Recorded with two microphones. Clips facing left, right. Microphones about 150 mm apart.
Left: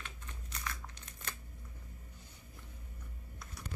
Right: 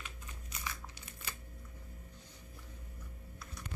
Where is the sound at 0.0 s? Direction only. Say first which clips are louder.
Even; 5° right (ahead or behind).